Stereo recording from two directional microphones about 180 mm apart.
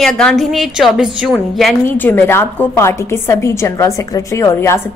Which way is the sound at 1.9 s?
10° left (ahead or behind).